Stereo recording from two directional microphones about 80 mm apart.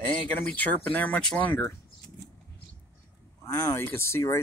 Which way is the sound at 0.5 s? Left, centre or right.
Centre.